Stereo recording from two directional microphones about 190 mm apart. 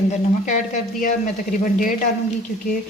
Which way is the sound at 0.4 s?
40° left (ahead or behind).